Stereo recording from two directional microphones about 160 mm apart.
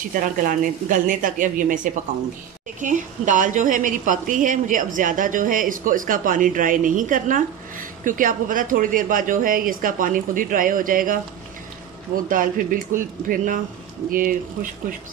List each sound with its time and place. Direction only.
0.0 s a woman's voice: 60° right (ahead or behind)
2.8 s a woman's voice: 55° right (ahead or behind)
12.3 s a woman's voice: 60° right (ahead or behind)